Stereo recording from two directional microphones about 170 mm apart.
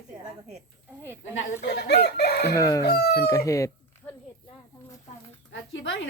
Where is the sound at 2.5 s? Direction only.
20° left (ahead or behind).